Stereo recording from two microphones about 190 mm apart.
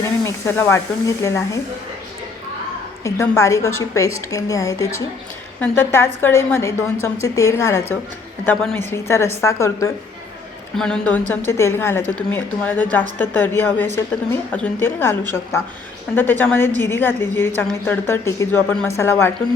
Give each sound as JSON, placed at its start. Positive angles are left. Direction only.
{"t": 0.3, "sound": "a woman's voice", "side_deg": 15}
{"t": 3.0, "sound": "a woman's voice", "side_deg": 15}
{"t": 10.8, "sound": "a woman's voice", "side_deg": 5}